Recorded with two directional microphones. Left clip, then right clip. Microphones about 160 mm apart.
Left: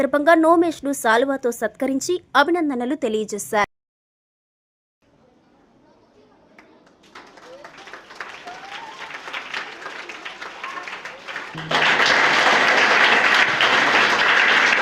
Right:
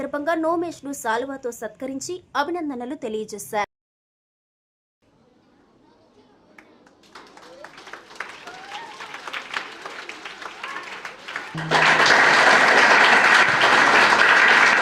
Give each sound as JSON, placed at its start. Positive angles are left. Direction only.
{"t": 0.0, "sound": "a woman's voice", "side_deg": 35}
{"t": 7.9, "sound": "applause", "side_deg": -10}
{"t": 11.5, "sound": "applause", "side_deg": -15}